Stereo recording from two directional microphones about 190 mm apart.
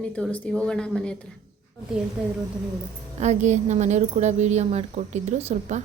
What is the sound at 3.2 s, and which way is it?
A woman's voice, 40° right (ahead or behind).